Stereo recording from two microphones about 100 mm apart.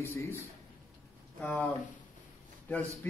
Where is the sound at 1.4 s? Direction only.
15° left (ahead or behind).